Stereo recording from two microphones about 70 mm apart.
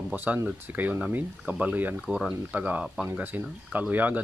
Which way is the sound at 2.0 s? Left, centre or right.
Centre.